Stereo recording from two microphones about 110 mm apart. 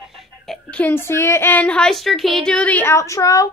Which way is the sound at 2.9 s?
30° left (ahead or behind).